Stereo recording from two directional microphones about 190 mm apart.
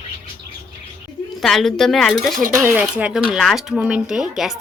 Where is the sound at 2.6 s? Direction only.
15° right (ahead or behind).